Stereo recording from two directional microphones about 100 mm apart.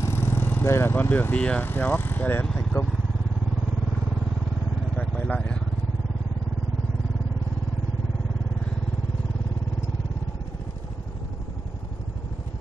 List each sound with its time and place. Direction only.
0.0 s speech: 25° left (ahead or behind)
4.9 s vehicle: 15° left (ahead or behind)